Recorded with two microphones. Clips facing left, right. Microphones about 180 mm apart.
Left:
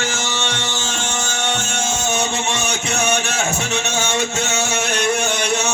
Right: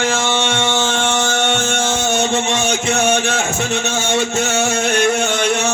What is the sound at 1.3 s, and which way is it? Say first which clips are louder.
Music: right 6 dB; 55° right (ahead or behind).